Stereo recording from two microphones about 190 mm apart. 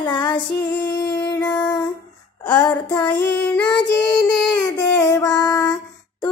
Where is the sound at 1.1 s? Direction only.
15° left (ahead or behind).